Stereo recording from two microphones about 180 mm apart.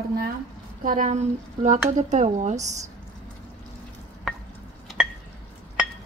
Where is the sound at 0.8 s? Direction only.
45° right (ahead or behind).